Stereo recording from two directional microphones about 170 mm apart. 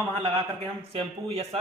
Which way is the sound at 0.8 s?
35° right (ahead or behind).